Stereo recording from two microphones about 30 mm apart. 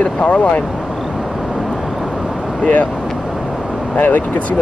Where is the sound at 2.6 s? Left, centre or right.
Left.